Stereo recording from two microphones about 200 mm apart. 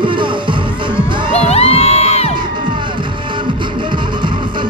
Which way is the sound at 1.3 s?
30° left (ahead or behind).